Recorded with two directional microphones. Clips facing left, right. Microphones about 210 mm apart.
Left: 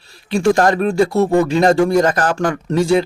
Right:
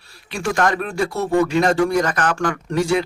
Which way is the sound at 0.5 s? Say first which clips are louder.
Left 6 dB; 35° left (ahead or behind).